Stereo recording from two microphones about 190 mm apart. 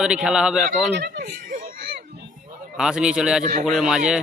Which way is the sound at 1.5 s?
50° right (ahead or behind).